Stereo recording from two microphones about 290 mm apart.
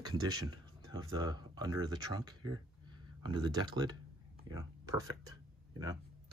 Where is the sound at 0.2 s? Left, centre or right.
Centre.